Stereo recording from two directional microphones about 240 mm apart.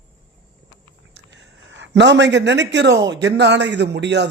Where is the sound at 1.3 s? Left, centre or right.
Right.